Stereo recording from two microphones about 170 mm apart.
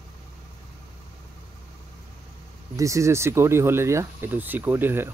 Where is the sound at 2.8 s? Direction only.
20° right (ahead or behind).